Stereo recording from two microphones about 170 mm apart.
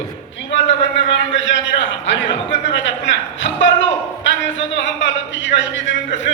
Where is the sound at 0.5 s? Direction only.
90° left.